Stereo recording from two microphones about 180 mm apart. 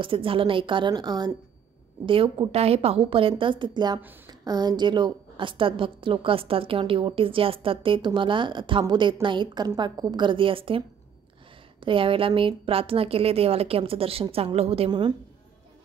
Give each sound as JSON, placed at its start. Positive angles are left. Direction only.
{"t": 0.0, "sound": "a woman's voice", "side_deg": -30}
{"t": 11.8, "sound": "a woman's voice", "side_deg": -30}